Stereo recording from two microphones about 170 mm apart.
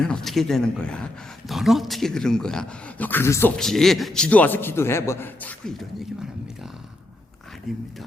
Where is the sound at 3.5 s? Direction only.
Centre (ahead or behind).